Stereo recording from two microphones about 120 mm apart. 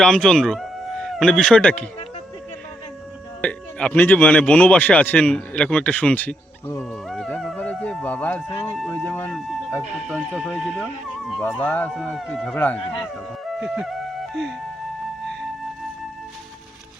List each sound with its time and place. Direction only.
0.0 s a man's voice: 5° left (ahead or behind)
3.4 s speech: 10° left (ahead or behind)
8.4 s speech: 5° left (ahead or behind)
8.9 s speech: 20° left (ahead or behind)
9.3 s speech: 5° left (ahead or behind)
11.6 s speech: 15° left (ahead or behind)
11.9 s speech: centre (ahead or behind)
13.6 s speech: centre (ahead or behind)